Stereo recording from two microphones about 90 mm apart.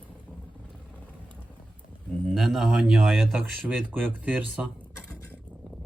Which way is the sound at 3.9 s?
15° right (ahead or behind).